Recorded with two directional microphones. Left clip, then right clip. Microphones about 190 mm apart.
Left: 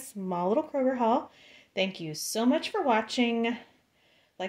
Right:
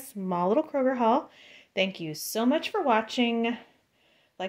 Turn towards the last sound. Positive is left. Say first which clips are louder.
# right 1 dB
turn(degrees=0)  # may be behind; listen again after turning